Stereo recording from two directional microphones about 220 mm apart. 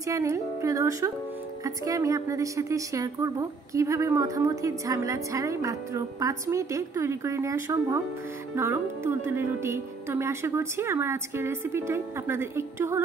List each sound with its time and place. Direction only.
0.0 s a woman's voice: 15° right (ahead or behind)